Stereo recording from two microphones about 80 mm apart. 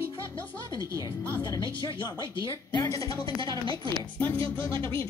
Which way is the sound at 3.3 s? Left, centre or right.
Right.